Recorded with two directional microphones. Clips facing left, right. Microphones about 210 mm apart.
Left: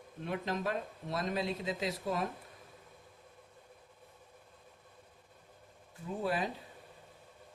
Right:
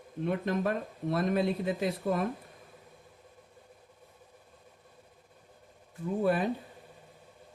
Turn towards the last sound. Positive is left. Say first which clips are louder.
# right 7 dB
turn(degrees=-55)  # may be behind; listen again after turning